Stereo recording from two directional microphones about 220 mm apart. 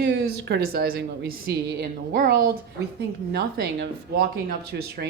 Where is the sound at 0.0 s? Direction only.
50° right (ahead or behind).